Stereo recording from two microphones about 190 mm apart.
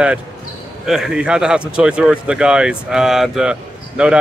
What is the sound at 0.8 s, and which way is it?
Speech, centre (ahead or behind).